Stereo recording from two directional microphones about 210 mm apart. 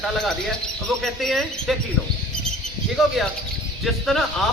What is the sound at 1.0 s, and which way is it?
Speech, centre (ahead or behind).